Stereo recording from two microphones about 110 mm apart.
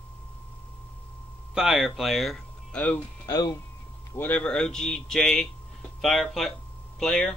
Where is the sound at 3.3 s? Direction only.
35° left (ahead or behind).